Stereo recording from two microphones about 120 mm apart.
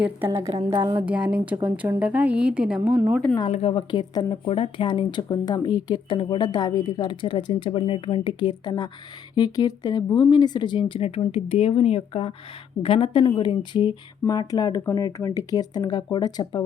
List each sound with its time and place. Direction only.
0.3 s a woman's voice: 30° right (ahead or behind)
1.0 s a woman's voice: 10° right (ahead or behind)
3.4 s speech: 50° left (ahead or behind)